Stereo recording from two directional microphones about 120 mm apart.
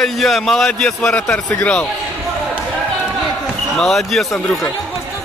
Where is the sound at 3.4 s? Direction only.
Centre (ahead or behind).